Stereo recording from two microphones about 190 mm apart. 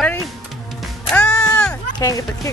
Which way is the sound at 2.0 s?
20° left (ahead or behind).